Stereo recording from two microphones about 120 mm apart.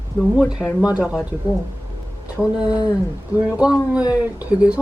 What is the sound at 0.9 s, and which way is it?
Speech, 10° right (ahead or behind).